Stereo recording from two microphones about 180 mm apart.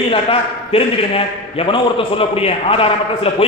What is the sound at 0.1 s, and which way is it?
A man's voice, 30° left (ahead or behind).